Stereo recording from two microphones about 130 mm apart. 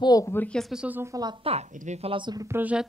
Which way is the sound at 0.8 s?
15° right (ahead or behind).